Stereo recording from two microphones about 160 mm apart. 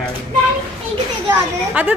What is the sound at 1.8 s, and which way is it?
Speech, 10° right (ahead or behind).